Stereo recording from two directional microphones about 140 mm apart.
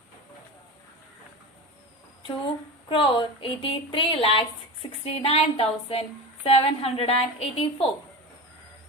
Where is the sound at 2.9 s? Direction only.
35° left (ahead or behind).